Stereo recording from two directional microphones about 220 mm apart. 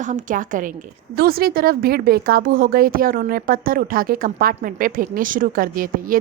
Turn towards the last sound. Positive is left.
turn(degrees=-40)  # may be behind; listen again after turning